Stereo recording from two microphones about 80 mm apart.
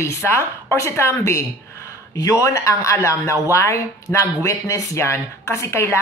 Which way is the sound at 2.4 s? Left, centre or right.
Left.